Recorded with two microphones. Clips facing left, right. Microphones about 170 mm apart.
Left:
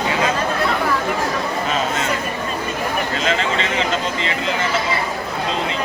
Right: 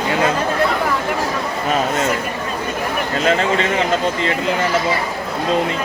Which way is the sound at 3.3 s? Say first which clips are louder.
Right 6 dB; 50° right (ahead or behind).